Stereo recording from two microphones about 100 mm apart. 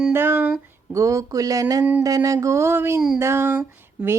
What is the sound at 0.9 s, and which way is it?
Speech, 30° right (ahead or behind).